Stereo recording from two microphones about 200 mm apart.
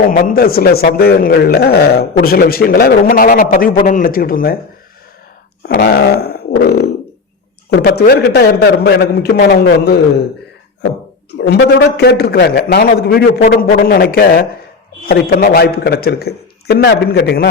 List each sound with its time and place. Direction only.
0.2 s a man's voice: 45° left (ahead or behind)
5.6 s a man's voice: 55° left (ahead or behind)
11.3 s a man's voice: 55° left (ahead or behind)